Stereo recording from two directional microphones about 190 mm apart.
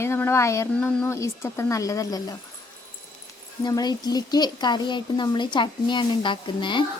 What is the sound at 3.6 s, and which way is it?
Speech, 20° left (ahead or behind).